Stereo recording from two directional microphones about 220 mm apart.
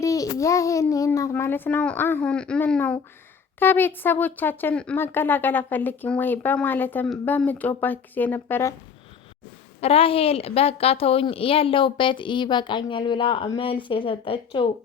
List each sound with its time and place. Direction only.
0.0 s speech: 15° left (ahead or behind)
9.8 s a woman's voice: 25° left (ahead or behind)